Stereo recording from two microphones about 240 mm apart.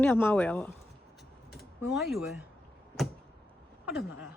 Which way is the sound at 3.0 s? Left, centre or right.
Centre.